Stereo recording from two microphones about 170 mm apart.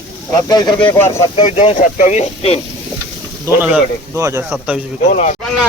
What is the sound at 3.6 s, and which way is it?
Speech, 10° right (ahead or behind).